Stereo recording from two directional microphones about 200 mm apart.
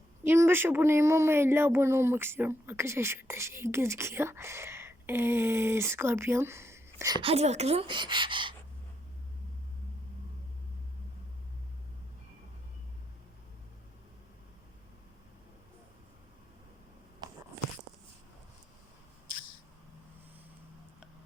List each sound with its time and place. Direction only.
0.3 s speech: 10° right (ahead or behind)
17.2 s biting: 20° right (ahead or behind)